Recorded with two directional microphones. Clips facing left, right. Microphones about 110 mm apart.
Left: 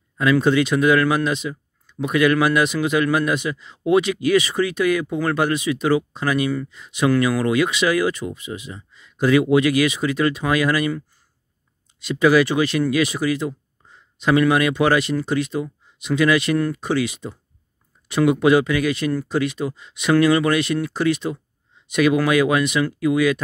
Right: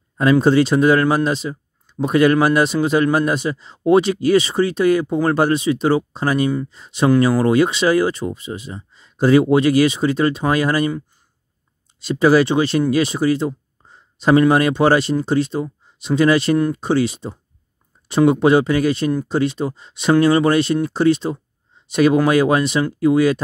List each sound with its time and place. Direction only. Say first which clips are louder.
0.2 s speech: right 3 dB; 35° right (ahead or behind)
12.0 s speech: right 2 dB; 35° right (ahead or behind)